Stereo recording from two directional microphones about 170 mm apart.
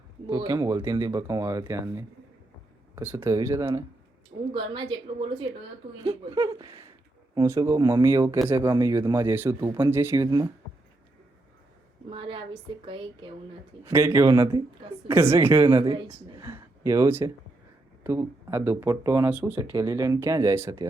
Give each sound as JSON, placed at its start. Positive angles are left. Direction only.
{"t": 0.3, "sound": "speech", "side_deg": -30}
{"t": 4.5, "sound": "speech", "side_deg": -30}
{"t": 12.1, "sound": "speech", "side_deg": -30}
{"t": 13.8, "sound": "speech", "side_deg": -15}
{"t": 15.9, "sound": "speech", "side_deg": -25}
{"t": 16.4, "sound": "speech", "side_deg": -15}